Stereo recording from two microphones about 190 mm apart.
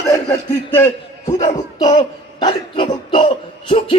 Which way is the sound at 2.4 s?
25° left (ahead or behind).